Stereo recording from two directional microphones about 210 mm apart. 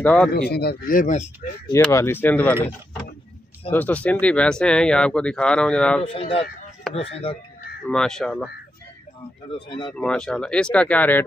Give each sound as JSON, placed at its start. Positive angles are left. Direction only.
{"t": 0.0, "sound": "speech", "side_deg": 5}
{"t": 0.3, "sound": "speech", "side_deg": 50}
{"t": 1.7, "sound": "speech", "side_deg": 15}
{"t": 6.0, "sound": "speech", "side_deg": 25}
{"t": 7.9, "sound": "speech", "side_deg": 5}
{"t": 9.7, "sound": "speech", "side_deg": 20}
{"t": 9.9, "sound": "speech", "side_deg": 5}